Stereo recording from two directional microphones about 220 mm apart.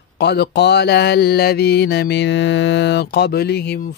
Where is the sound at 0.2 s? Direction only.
50° left (ahead or behind).